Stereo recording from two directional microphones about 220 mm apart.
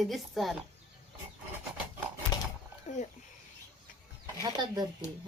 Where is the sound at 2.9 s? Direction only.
35° left (ahead or behind).